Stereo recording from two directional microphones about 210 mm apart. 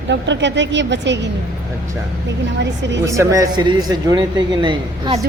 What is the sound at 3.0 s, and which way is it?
A man's voice, 15° right (ahead or behind).